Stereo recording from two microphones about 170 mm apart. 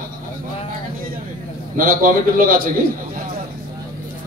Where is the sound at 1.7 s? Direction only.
55° right (ahead or behind).